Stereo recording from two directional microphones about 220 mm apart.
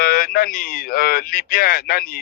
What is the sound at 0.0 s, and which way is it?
A man's voice, 45° left (ahead or behind).